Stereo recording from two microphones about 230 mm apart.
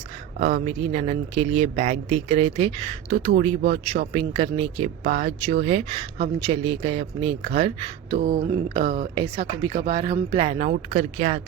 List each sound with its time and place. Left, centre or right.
0.3 s speech: right
8.1 s a sound: right
9.1 s speech: centre